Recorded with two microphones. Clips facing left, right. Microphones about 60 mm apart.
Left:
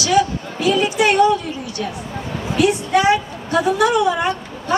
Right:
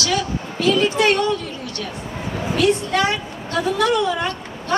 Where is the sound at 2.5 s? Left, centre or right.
Centre.